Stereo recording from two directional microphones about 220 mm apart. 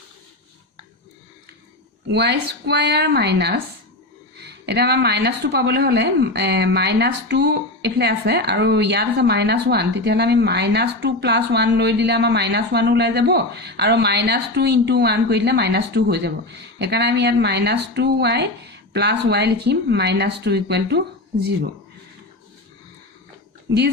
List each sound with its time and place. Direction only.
2.0 s speech: 50° right (ahead or behind)
23.6 s speech: 50° right (ahead or behind)